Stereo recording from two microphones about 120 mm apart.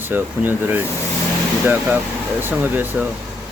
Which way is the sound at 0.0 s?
15° right (ahead or behind).